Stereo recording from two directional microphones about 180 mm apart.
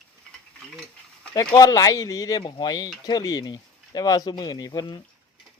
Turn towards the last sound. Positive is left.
turn(degrees=25)  # may be behind; listen again after turning